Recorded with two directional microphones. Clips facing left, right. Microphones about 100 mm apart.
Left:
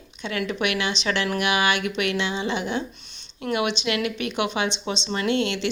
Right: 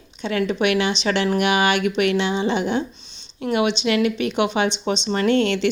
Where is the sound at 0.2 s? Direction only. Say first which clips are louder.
Right 5 dB; 30° right (ahead or behind).